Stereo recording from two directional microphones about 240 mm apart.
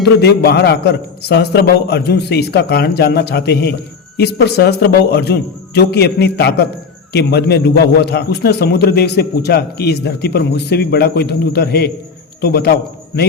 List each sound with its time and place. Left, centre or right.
0.0 s a man's voice: left